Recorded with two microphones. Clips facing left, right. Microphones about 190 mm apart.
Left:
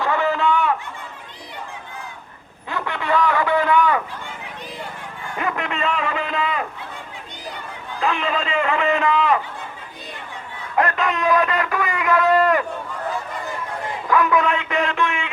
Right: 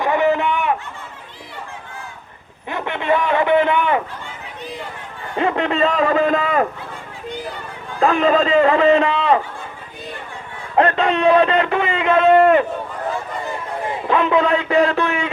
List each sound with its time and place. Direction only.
0.0 s a sound: 20° right (ahead or behind)
2.6 s a sound: 20° right (ahead or behind)
5.4 s a man's voice: 30° right (ahead or behind)
8.0 s a man's voice: 40° right (ahead or behind)
10.8 s a man's voice: 30° right (ahead or behind)
14.1 s a man's voice: 25° right (ahead or behind)